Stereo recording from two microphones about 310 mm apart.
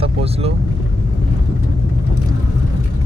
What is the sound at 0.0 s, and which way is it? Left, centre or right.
Vehicle, centre.